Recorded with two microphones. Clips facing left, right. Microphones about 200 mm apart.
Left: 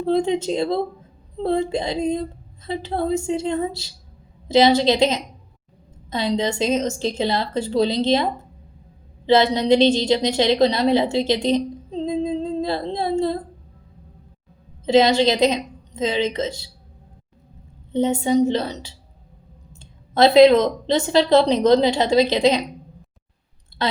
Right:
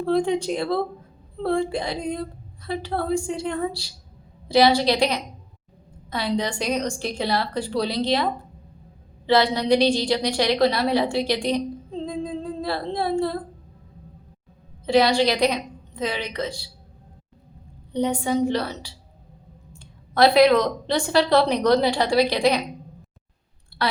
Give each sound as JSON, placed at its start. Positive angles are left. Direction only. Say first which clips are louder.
{"t": 0.0, "sound": "a woman's voice", "louder": "left 2 dB", "side_deg": 20}
{"t": 14.8, "sound": "a woman's voice", "louder": "left 3 dB", "side_deg": 20}
{"t": 17.9, "sound": "a woman's voice", "louder": "left 4 dB", "side_deg": 25}
{"t": 23.8, "sound": "speech", "louder": "left 2 dB", "side_deg": 25}